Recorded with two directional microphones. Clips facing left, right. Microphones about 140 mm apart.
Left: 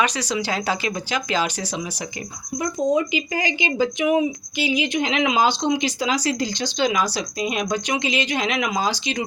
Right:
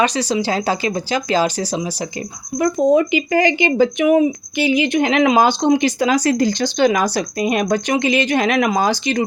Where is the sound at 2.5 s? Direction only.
60° right (ahead or behind).